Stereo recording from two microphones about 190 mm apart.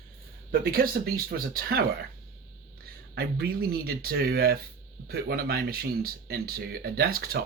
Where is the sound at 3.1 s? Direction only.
55° right (ahead or behind).